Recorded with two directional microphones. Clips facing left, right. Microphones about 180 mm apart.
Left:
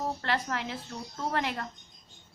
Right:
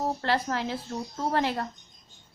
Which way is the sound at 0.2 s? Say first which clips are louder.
Right 4 dB; 35° right (ahead or behind).